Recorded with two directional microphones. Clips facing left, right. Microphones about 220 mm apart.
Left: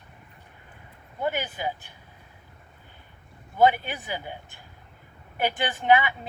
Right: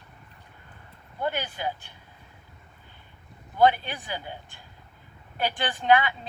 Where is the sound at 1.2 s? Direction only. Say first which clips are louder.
Left 1 dB; 15° left (ahead or behind).